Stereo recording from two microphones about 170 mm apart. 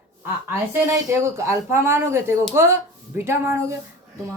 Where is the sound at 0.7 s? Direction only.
15° right (ahead or behind).